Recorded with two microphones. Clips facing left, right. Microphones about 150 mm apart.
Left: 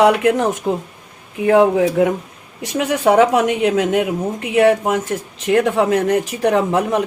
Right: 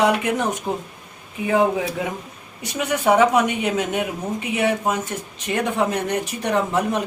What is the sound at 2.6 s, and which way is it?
Speech, 90° left.